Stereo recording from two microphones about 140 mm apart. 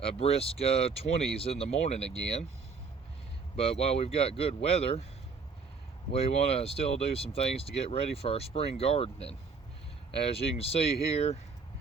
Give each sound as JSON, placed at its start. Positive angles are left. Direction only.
{"t": 0.0, "sound": "speech", "side_deg": 45}
{"t": 3.5, "sound": "speech", "side_deg": 45}
{"t": 6.1, "sound": "speech", "side_deg": 45}